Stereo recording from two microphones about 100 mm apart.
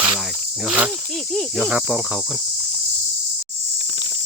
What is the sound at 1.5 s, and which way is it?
Cricket, 15° right (ahead or behind).